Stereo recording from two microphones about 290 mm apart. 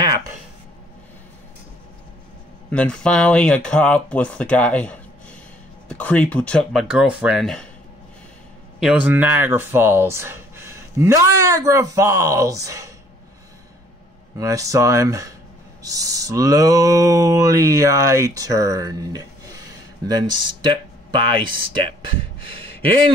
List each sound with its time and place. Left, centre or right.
2.7 s speech: centre
8.7 s speech: centre
14.4 s speech: centre
22.5 s a sound: centre